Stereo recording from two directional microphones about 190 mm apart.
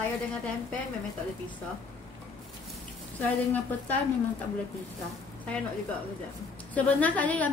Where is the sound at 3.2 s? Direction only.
10° left (ahead or behind).